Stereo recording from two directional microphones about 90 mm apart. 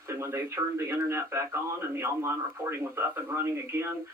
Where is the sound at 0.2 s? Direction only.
35° right (ahead or behind).